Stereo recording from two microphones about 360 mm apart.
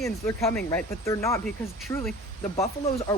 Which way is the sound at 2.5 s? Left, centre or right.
Centre.